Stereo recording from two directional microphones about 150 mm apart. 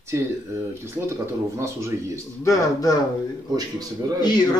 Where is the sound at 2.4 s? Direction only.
20° left (ahead or behind).